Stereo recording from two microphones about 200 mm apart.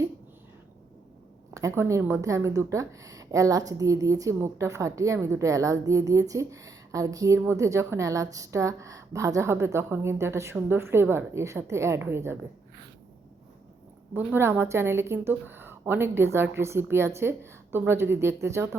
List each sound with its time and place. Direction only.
1.5 s a woman's voice: 15° right (ahead or behind)
14.1 s a woman's voice: 10° right (ahead or behind)